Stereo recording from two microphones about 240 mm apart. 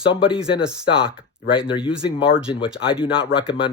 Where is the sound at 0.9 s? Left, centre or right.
Left.